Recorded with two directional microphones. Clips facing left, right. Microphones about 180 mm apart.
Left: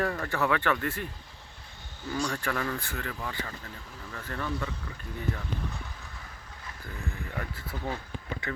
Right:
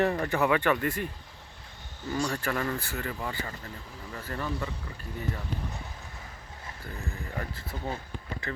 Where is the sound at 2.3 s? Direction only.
5° right (ahead or behind).